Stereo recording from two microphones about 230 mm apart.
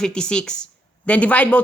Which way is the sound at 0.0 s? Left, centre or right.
Centre.